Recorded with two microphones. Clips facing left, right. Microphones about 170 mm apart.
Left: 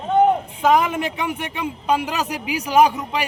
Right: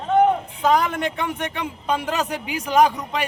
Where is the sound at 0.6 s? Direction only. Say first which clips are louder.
Left 2 dB; 5° left (ahead or behind).